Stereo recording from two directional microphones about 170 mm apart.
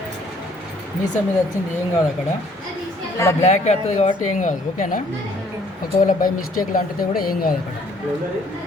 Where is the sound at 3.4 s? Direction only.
40° left (ahead or behind); by 7.5 s 55° left (ahead or behind).